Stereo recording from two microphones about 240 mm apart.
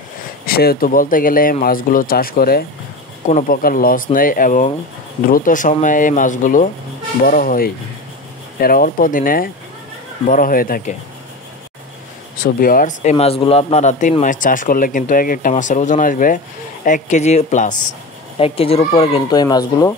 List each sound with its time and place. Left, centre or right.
0.5 s speech: left
12.5 s speech: left; by 19.6 s centre